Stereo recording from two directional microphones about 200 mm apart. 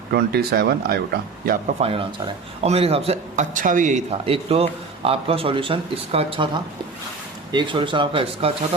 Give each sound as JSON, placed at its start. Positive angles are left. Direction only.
{"t": 0.1, "sound": "speech", "side_deg": -50}
{"t": 1.8, "sound": "speech", "side_deg": -25}
{"t": 7.5, "sound": "speech", "side_deg": -25}